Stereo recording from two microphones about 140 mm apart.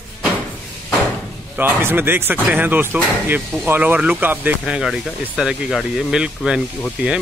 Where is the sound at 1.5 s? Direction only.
15° right (ahead or behind).